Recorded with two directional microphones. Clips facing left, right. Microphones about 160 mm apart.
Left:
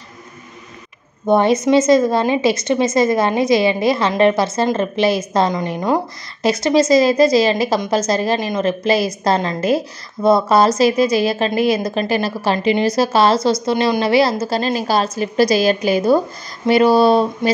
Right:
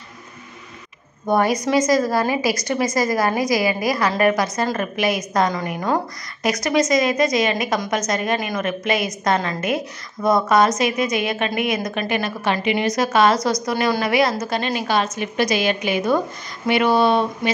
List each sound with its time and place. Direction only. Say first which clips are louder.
1.2 s a woman's voice: left 5 dB; 25° left (ahead or behind)